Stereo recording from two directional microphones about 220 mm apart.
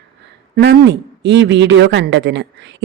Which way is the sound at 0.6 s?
50° right (ahead or behind).